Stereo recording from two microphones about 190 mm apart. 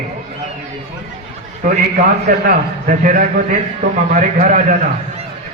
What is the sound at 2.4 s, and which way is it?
A man's voice, 45° right (ahead or behind).